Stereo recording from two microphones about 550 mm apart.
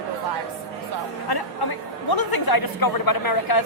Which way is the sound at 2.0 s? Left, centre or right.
Left.